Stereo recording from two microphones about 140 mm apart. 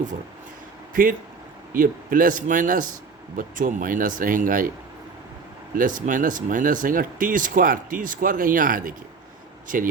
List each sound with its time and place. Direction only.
1.7 s speech: 80° right
5.7 s speech: 75° right (ahead or behind)